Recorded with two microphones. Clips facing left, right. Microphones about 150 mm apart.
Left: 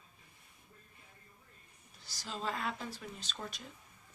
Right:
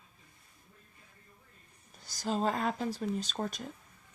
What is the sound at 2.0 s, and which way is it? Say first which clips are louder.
Speech: right 9 dB; 45° right (ahead or behind).